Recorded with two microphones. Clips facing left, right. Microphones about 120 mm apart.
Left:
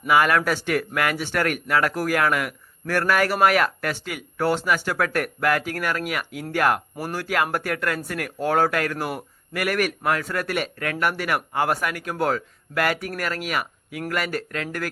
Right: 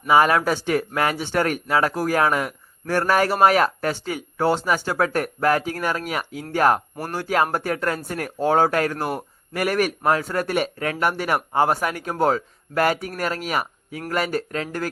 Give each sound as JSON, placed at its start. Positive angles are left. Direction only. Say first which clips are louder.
{"t": 0.1, "sound": "a man's voice", "louder": "right 2 dB", "side_deg": -30}